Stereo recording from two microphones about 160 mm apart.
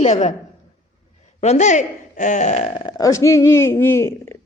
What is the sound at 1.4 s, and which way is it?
A woman's voice, 45° left (ahead or behind).